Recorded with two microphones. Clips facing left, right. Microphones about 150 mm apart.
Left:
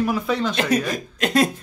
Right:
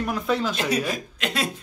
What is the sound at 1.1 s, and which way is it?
Speech, 45° left (ahead or behind).